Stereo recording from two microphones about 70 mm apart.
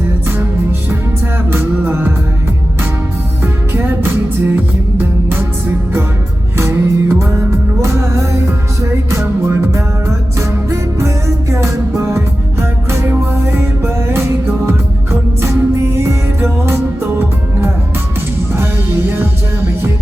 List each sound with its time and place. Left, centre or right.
1.5 s music: right
3.4 s music: right
6.6 s music: right